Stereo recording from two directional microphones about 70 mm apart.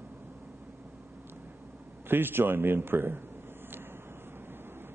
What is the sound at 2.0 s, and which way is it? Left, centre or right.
A man's voice, right.